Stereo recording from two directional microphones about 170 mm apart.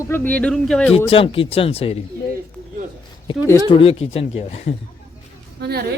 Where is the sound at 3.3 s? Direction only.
30° left (ahead or behind).